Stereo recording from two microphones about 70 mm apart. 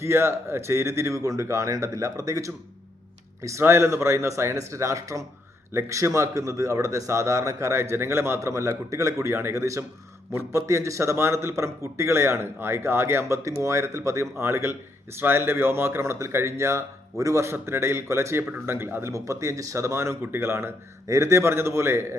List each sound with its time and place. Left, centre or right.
0.0 s a man's voice: right
3.6 s a man's voice: right
19.1 s speech: right